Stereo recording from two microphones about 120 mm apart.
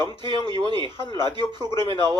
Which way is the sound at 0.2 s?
40° right (ahead or behind).